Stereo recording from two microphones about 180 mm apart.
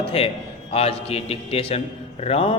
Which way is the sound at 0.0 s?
35° left (ahead or behind).